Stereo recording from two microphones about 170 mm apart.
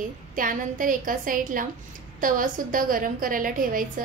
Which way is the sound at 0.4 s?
55° right (ahead or behind).